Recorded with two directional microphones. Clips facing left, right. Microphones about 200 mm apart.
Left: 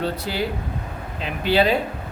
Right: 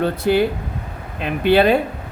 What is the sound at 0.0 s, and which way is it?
Speech, 55° right (ahead or behind).